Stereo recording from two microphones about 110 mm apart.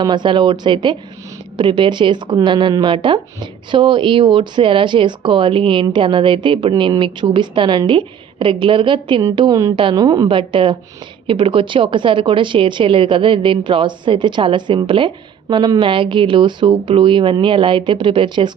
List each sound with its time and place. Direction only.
0.0 s a woman's voice: 45° right (ahead or behind)
10.2 s a woman's voice: 50° right (ahead or behind)